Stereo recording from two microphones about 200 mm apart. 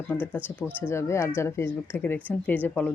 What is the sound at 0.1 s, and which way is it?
Speech, 5° left (ahead or behind).